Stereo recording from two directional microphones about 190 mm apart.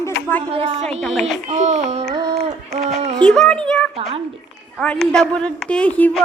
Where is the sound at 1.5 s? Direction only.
35° right (ahead or behind).